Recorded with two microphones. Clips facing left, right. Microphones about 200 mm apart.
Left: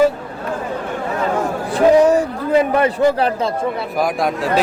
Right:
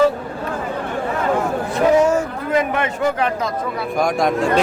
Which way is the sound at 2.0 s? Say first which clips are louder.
Left 3 dB; 35° left (ahead or behind).